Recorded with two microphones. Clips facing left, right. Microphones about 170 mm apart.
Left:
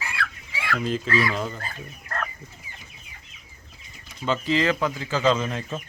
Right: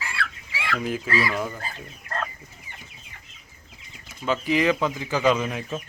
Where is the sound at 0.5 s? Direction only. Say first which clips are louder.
Left 1 dB; 10° right (ahead or behind).